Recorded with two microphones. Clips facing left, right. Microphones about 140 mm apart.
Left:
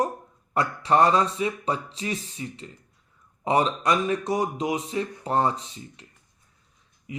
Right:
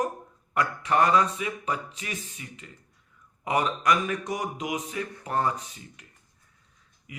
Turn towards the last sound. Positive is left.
turn(degrees=25)  # may be behind; listen again after turning